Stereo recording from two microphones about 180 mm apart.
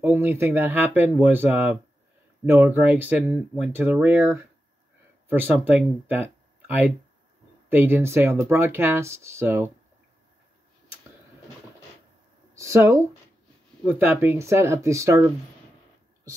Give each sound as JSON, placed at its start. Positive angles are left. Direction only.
{"t": 0.0, "sound": "speech", "side_deg": -15}
{"t": 12.5, "sound": "speech", "side_deg": -15}